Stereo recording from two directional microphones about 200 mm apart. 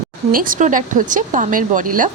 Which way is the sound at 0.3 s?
45° right (ahead or behind).